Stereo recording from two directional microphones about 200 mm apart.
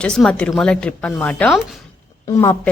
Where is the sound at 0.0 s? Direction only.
5° left (ahead or behind).